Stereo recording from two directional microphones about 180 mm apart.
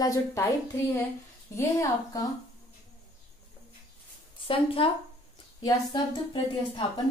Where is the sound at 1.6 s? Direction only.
15° left (ahead or behind).